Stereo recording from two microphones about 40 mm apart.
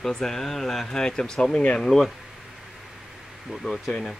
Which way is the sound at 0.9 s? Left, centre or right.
Centre.